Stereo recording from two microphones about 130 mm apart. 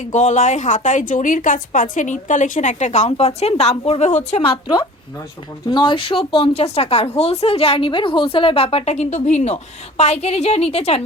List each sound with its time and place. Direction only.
0.1 s a woman's voice: 65° left (ahead or behind)
4.4 s a woman's voice: 40° left (ahead or behind)
5.6 s a woman's voice: 35° left (ahead or behind)